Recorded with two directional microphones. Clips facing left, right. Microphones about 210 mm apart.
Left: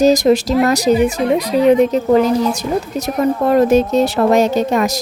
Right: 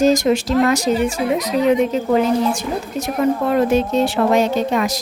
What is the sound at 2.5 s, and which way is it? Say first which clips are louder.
Speech: left 3 dB; 40° left (ahead or behind).